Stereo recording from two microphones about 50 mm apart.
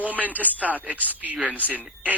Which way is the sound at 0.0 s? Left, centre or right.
Right.